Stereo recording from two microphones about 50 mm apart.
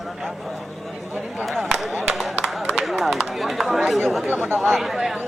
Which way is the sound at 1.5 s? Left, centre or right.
Centre.